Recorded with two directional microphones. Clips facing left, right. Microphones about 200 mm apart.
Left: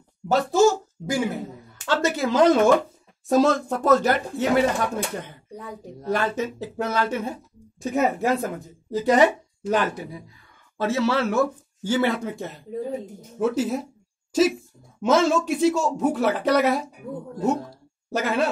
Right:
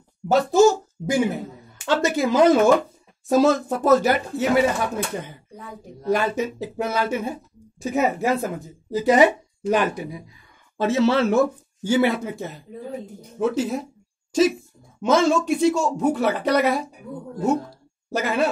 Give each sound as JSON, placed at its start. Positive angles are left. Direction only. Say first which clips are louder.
{"t": 0.3, "sound": "a sound", "louder": "right 3 dB", "side_deg": -15}
{"t": 1.8, "sound": "speech", "louder": "right 2 dB", "side_deg": -15}
{"t": 18.1, "sound": "speech", "louder": "right 1 dB", "side_deg": 0}